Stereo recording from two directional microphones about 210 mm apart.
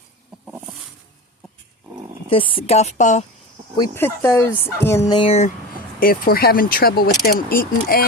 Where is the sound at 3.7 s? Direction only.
15° left (ahead or behind).